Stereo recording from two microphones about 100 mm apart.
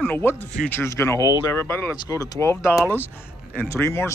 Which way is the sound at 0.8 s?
30° left (ahead or behind).